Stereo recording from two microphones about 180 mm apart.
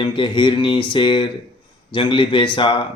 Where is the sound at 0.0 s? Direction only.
25° left (ahead or behind).